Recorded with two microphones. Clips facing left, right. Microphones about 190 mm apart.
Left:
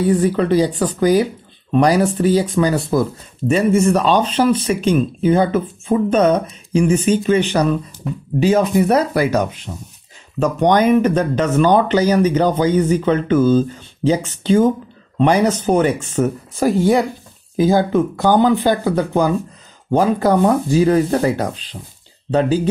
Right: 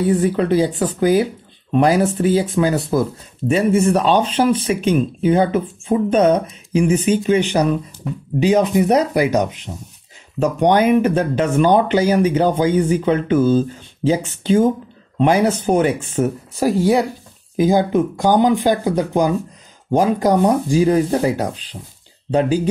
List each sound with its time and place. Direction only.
0.2 s speech: 5° right (ahead or behind)